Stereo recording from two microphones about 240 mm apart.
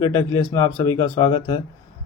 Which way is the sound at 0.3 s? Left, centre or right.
Centre.